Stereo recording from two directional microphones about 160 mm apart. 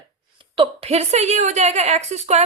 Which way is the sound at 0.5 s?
35° right (ahead or behind).